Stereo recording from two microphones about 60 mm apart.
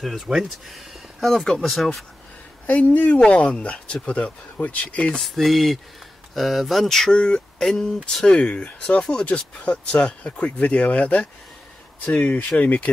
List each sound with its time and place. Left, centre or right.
0.0 s speech: centre
1.2 s speech: centre
2.6 s speech: left
5.2 s speech: centre; by 12.9 s left